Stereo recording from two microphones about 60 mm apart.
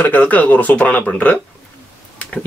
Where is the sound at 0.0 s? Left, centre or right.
Left.